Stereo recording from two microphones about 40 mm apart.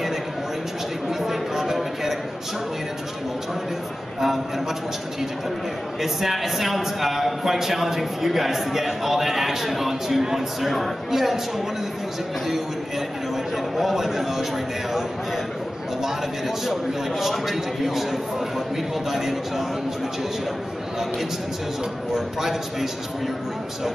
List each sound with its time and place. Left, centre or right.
1.2 s a sound: centre
5.9 s a man's voice: centre
13.7 s a man's voice: centre
16.0 s a man's voice: centre
22.1 s a man's voice: centre